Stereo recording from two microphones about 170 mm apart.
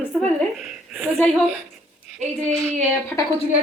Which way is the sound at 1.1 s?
5° left (ahead or behind).